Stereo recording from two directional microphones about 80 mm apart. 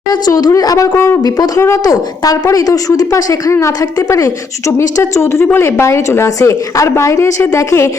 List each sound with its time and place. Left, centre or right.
0.1 s a woman's voice: left
0.9 s a woman's voice: left
1.8 s a woman's voice: left